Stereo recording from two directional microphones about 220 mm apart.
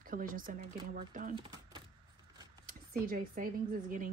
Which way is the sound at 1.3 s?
25° right (ahead or behind).